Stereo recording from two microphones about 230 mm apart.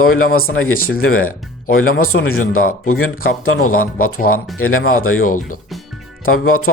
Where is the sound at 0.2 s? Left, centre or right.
Left.